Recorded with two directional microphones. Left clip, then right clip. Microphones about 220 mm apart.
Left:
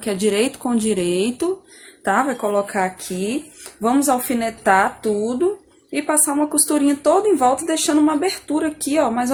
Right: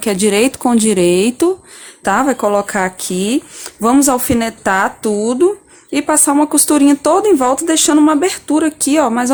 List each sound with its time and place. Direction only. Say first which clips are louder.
0.0 s speech: right 6 dB; 40° right (ahead or behind)